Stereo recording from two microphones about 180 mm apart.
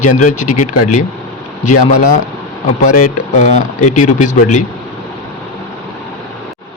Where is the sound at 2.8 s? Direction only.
40° left (ahead or behind).